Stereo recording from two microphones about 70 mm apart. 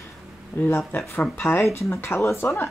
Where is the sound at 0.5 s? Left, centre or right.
Left.